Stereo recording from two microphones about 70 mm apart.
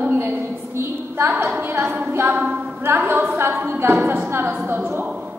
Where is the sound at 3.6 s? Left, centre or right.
Right.